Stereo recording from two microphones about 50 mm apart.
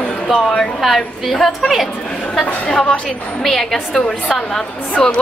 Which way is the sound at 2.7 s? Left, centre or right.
Centre.